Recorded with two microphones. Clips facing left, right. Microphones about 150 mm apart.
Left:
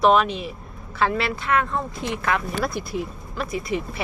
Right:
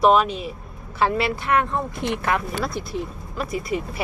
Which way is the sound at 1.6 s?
20° right (ahead or behind).